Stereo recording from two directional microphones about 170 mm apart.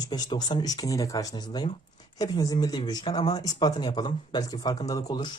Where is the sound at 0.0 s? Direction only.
25° left (ahead or behind).